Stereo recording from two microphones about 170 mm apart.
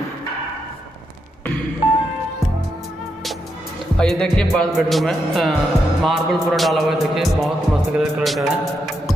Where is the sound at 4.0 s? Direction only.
5° left (ahead or behind).